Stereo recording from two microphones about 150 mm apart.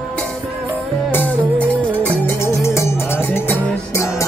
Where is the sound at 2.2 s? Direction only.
20° left (ahead or behind).